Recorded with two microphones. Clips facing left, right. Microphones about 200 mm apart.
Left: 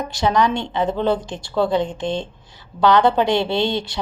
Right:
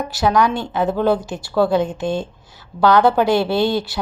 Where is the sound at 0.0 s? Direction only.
5° right (ahead or behind).